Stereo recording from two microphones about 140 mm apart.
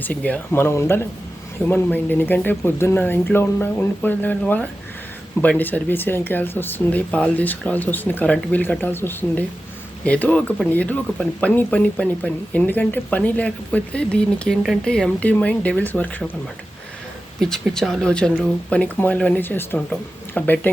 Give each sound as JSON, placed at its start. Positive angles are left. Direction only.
{"t": 0.0, "sound": "speech", "side_deg": 10}
{"t": 17.4, "sound": "speech", "side_deg": 0}